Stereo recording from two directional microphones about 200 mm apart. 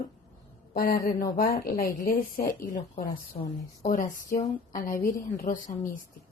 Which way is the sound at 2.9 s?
45° left (ahead or behind).